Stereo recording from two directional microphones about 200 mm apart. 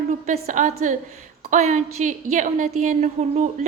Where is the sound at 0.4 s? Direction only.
40° right (ahead or behind).